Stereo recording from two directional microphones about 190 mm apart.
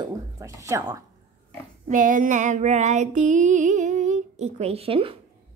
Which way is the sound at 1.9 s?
45° right (ahead or behind).